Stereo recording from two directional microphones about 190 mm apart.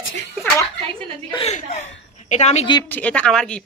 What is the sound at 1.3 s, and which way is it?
Speech, 35° left (ahead or behind).